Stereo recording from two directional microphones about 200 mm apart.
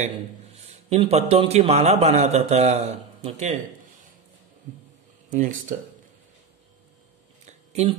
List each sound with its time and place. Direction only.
0.0 s a man's voice: 35° right (ahead or behind)
5.3 s a man's voice: 40° right (ahead or behind)
7.4 s a sound: 35° right (ahead or behind)